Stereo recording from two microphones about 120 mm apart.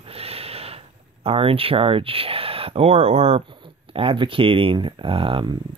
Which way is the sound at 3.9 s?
50° right (ahead or behind).